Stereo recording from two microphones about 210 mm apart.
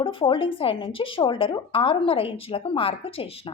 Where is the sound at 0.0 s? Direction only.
25° left (ahead or behind).